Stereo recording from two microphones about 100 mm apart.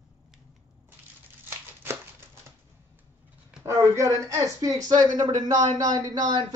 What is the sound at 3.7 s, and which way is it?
Speech, 35° right (ahead or behind).